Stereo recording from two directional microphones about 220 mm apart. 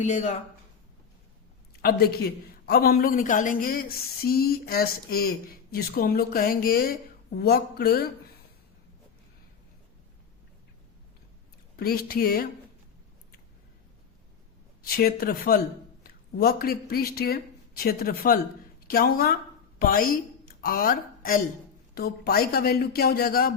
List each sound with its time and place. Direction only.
0.0 s speech: 30° left (ahead or behind)
1.8 s a man's voice: 45° left (ahead or behind)
11.8 s a man's voice: 45° left (ahead or behind)
14.8 s a man's voice: 45° left (ahead or behind)